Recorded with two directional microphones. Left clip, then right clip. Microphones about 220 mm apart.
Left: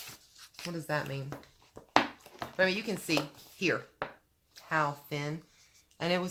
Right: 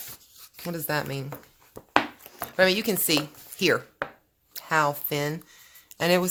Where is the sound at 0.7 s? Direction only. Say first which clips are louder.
Right 6 dB; 55° right (ahead or behind).